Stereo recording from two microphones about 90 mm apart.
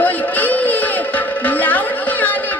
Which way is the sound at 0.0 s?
20° left (ahead or behind).